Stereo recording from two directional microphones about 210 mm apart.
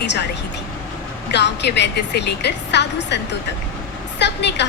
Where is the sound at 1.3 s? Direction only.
55° left (ahead or behind).